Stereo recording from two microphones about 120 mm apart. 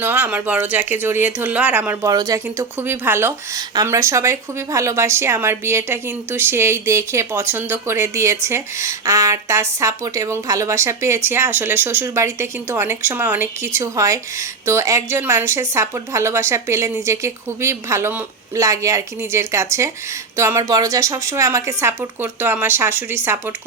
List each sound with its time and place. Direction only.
0.0 s speech: 15° right (ahead or behind)
2.0 s speech: 30° right (ahead or behind)